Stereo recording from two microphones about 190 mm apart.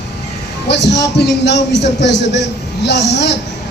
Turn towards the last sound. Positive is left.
turn(degrees=65)  # may be behind; listen again after turning